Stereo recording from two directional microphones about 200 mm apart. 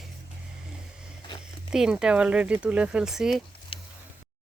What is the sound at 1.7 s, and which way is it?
Speech, 5° right (ahead or behind).